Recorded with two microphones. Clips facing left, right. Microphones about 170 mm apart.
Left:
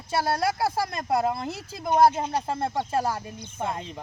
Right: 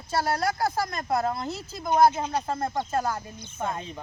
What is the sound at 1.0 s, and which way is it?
Speech, 15° left (ahead or behind).